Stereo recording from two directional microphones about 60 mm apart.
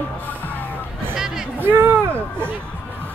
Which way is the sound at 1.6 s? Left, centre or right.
Right.